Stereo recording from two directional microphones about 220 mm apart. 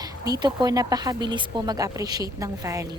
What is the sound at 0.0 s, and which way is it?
A woman's voice, 20° right (ahead or behind).